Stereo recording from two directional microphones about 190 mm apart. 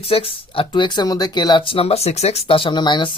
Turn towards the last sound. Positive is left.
turn(degrees=25)  # may be behind; listen again after turning